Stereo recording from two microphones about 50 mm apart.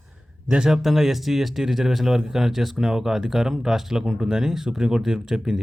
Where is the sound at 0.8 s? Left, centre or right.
Centre.